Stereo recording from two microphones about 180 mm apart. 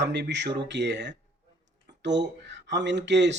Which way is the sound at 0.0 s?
75° right (ahead or behind).